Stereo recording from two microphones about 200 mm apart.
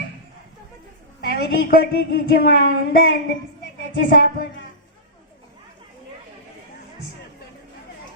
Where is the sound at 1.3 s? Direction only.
50° left (ahead or behind).